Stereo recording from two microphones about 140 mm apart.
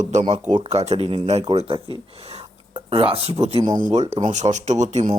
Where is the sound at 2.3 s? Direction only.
45° right (ahead or behind).